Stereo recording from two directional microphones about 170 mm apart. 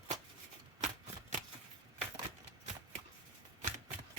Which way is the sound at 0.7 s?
45° right (ahead or behind).